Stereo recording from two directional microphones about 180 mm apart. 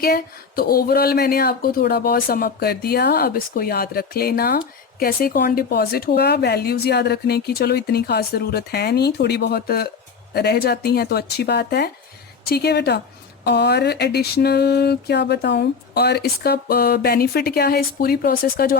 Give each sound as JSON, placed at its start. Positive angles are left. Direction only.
{"t": 0.0, "sound": "mantra", "side_deg": 55}